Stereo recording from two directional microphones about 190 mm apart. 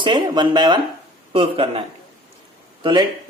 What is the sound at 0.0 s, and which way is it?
Speech, 25° right (ahead or behind).